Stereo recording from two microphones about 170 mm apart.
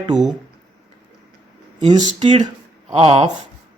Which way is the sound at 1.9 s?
30° right (ahead or behind).